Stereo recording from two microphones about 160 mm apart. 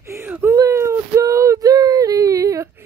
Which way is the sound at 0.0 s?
15° right (ahead or behind).